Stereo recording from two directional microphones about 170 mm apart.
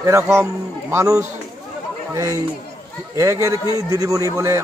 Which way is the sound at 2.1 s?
20° right (ahead or behind).